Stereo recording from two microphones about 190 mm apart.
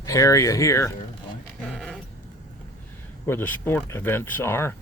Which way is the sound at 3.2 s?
10° left (ahead or behind).